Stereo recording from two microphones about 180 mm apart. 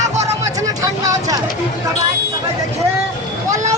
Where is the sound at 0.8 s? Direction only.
20° right (ahead or behind).